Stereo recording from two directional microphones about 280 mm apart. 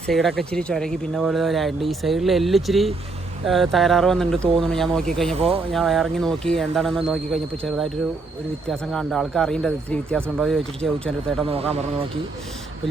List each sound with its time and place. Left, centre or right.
0.1 s speech: centre
5.3 s speech: right
5.7 s speech: centre
11.4 s speech: right